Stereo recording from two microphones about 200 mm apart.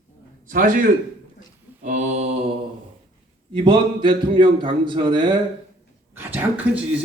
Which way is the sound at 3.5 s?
25° right (ahead or behind).